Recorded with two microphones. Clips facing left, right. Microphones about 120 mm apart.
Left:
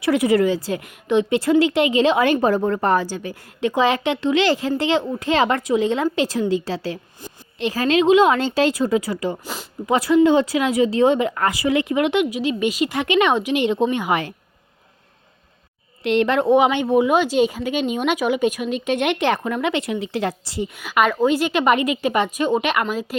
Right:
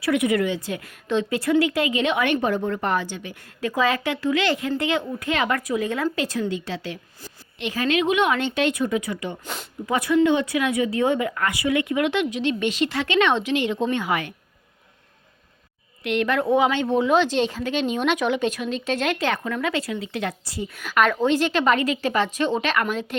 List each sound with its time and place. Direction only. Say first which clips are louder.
0.0 s a woman's voice: left 4 dB; 30° left (ahead or behind)
0.8 s a woman's voice: left 5 dB; 15° left (ahead or behind)
1.4 s a woman's voice: left 2 dB; 30° left (ahead or behind)
3.6 s a woman's voice: left 4 dB; 25° left (ahead or behind)
9.4 s a sound: left 2 dB; centre (ahead or behind)
9.8 s a woman's voice: left 4 dB; 30° left (ahead or behind)
16.0 s speech: left 5 dB; 30° left (ahead or behind)
20.7 s a woman's voice: left 1 dB; 10° left (ahead or behind)